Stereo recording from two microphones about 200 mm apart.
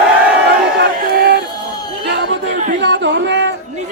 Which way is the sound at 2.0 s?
55° right (ahead or behind).